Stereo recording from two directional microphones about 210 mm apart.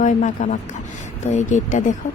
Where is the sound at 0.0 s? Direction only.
35° left (ahead or behind).